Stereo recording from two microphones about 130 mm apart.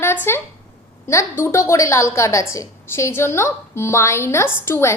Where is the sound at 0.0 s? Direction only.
15° left (ahead or behind).